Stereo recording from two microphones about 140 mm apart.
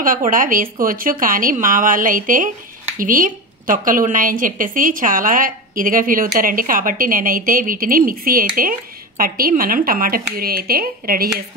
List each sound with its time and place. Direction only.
0.3 s a woman's voice: 80° right